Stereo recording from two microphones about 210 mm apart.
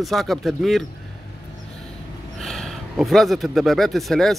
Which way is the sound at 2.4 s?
Centre (ahead or behind).